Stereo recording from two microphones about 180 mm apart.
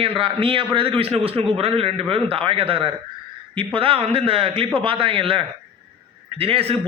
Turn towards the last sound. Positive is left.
turn(degrees=-35)  # may be behind; listen again after turning